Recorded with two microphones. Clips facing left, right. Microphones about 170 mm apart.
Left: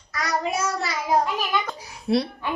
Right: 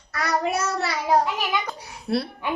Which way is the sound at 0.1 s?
60° right (ahead or behind).